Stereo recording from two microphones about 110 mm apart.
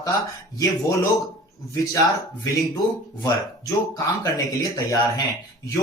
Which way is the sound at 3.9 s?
35° left (ahead or behind).